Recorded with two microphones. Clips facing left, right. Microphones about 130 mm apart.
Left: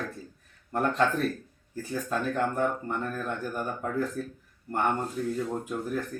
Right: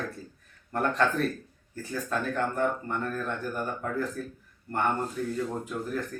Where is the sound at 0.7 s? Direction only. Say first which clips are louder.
Left 1 dB; 15° left (ahead or behind).